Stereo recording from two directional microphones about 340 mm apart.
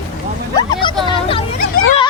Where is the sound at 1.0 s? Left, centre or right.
Centre.